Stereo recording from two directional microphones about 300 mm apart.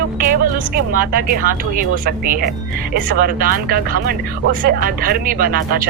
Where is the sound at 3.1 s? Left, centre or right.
Right.